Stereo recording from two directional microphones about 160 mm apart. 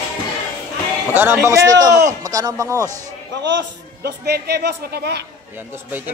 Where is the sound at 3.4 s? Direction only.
90° right.